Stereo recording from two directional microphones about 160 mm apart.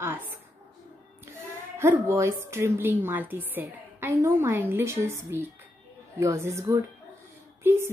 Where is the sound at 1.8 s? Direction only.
15° right (ahead or behind).